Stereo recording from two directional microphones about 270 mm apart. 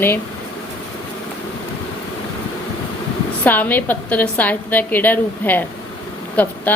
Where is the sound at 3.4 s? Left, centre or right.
Centre.